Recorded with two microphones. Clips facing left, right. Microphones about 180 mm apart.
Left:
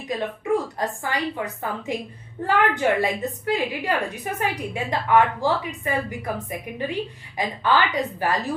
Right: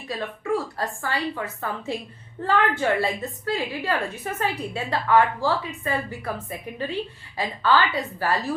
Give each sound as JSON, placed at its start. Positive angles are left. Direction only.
{"t": 0.0, "sound": "a woman's voice", "side_deg": 20}